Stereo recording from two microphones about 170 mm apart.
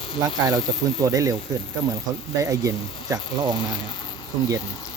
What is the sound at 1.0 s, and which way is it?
Speech, 20° right (ahead or behind).